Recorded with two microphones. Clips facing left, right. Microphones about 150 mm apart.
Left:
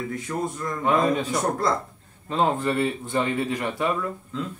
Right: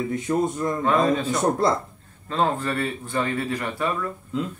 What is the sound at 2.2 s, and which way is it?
Speech, 15° left (ahead or behind).